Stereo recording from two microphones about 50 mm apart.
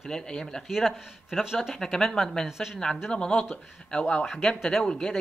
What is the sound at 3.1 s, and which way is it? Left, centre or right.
Speech, centre.